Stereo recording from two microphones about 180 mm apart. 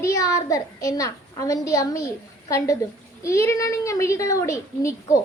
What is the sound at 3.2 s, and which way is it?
A woman's voice, 15° left (ahead or behind).